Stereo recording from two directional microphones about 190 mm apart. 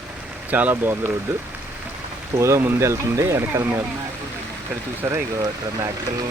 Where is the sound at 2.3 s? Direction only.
15° right (ahead or behind).